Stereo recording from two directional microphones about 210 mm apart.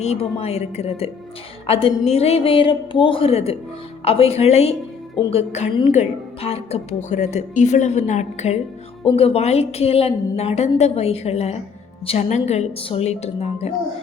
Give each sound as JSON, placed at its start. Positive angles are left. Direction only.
{"t": 0.0, "sound": "a woman's voice", "side_deg": 30}